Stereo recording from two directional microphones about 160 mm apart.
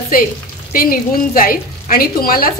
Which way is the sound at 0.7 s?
60° left (ahead or behind).